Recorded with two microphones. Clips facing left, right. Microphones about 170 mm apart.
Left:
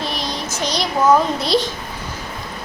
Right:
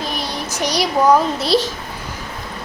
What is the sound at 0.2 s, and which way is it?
A child's voice, 10° right (ahead or behind).